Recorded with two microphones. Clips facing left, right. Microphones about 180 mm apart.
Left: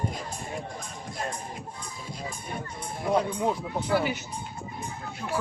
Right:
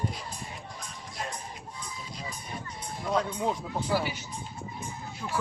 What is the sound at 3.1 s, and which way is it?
Speech, 10° left (ahead or behind).